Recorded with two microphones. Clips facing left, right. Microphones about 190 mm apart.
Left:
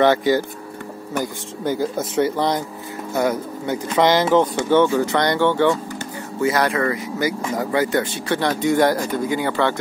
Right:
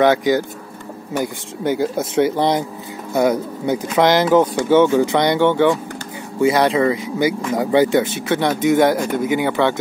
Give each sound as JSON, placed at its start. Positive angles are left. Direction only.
{"t": 1.1, "sound": "speech", "side_deg": -20}